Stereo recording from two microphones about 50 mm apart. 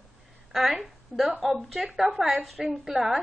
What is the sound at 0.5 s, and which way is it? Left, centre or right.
A woman's voice, centre.